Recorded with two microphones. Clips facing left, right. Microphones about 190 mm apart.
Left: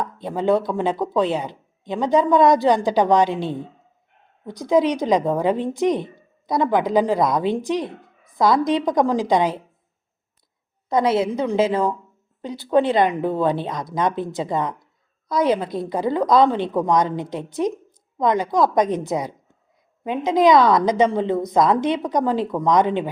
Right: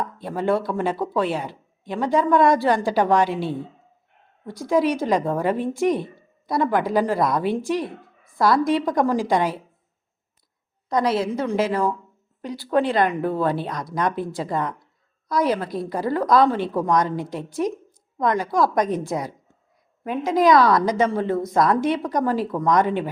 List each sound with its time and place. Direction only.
0.2 s a woman's voice: 20° left (ahead or behind)
10.8 s a woman's voice: 25° left (ahead or behind)